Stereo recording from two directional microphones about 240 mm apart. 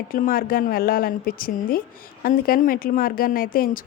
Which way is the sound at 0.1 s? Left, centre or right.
Left.